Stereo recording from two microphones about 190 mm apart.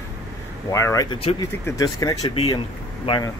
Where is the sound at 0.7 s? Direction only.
15° left (ahead or behind).